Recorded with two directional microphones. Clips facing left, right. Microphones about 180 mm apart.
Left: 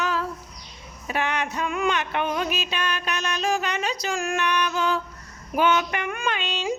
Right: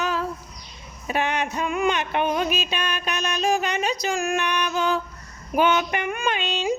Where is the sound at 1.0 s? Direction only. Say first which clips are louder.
Right 2 dB; 20° right (ahead or behind).